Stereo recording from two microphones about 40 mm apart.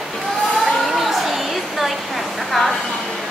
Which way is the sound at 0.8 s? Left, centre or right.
Centre.